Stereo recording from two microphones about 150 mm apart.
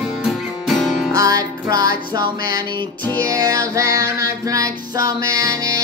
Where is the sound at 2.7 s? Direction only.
90° left.